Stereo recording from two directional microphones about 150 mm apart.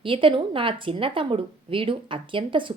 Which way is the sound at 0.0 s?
35° right (ahead or behind).